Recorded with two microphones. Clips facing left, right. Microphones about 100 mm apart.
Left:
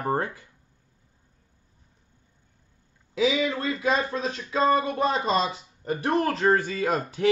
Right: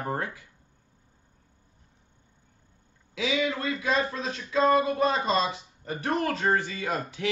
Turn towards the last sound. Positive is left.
turn(degrees=35)  # may be behind; listen again after turning